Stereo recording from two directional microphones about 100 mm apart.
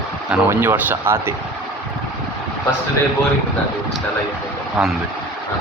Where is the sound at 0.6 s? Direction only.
25° right (ahead or behind).